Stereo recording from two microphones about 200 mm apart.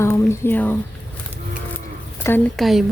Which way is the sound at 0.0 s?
15° left (ahead or behind).